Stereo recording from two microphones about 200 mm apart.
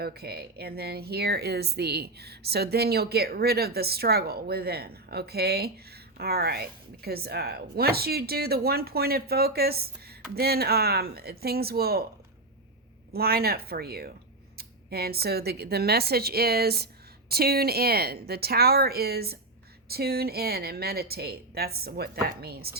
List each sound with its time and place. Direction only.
0.0 s a woman's voice: 50° right (ahead or behind)
13.1 s a woman's voice: 50° right (ahead or behind)